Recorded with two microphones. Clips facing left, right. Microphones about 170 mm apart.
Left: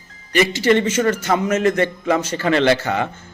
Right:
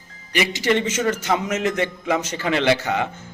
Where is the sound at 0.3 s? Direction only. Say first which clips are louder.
Left 5 dB; 15° right (ahead or behind).